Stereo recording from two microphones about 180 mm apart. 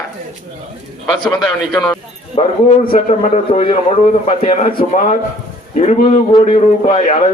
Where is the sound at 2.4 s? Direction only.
30° left (ahead or behind).